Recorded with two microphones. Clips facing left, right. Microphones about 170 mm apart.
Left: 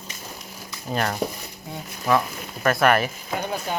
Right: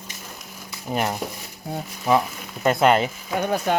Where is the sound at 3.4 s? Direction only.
55° right (ahead or behind).